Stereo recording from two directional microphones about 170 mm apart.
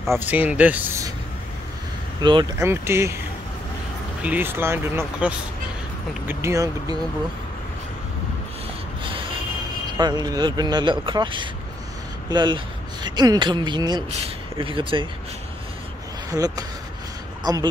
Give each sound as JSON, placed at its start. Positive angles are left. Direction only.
{"t": 0.2, "sound": "speech", "side_deg": -10}
{"t": 2.6, "sound": "speech", "side_deg": -15}
{"t": 4.2, "sound": "speech", "side_deg": -10}
{"t": 9.0, "sound": "a sound", "side_deg": -30}
{"t": 9.9, "sound": "speech", "side_deg": -25}
{"t": 16.3, "sound": "speech", "side_deg": -20}
{"t": 17.4, "sound": "a sound", "side_deg": -20}